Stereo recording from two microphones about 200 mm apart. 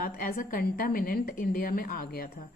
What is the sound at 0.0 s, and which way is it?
A woman's voice, 45° left (ahead or behind).